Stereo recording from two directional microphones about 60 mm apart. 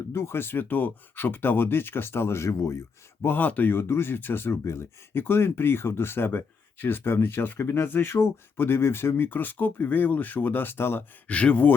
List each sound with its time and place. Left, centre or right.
0.1 s speech: left
11.3 s speech: centre